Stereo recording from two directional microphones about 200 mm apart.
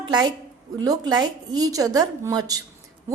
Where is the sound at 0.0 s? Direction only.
20° right (ahead or behind).